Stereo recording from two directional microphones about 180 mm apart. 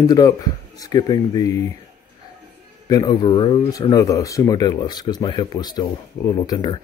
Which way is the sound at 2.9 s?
20° left (ahead or behind).